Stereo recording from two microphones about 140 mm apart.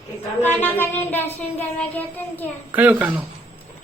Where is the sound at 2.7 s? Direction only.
10° right (ahead or behind).